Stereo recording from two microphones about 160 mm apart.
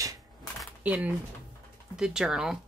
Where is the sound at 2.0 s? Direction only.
5° right (ahead or behind).